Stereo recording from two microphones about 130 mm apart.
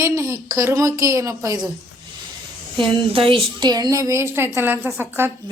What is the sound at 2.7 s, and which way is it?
Speech, 40° right (ahead or behind).